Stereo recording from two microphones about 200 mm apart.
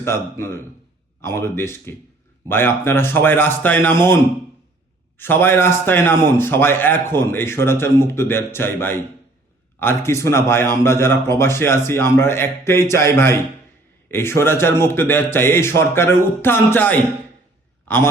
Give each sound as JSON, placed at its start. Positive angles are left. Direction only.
{"t": 0.0, "sound": "a man's voice", "side_deg": 15}
{"t": 5.1, "sound": "a man's voice", "side_deg": 10}